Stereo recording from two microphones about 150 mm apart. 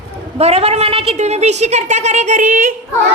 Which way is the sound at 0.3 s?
45° right (ahead or behind).